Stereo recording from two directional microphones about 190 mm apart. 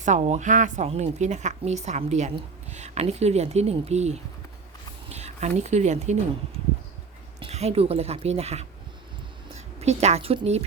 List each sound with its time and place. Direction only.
0.0 s speech: 40° right (ahead or behind)
7.4 s speech: 35° right (ahead or behind)
9.8 s speech: 35° right (ahead or behind)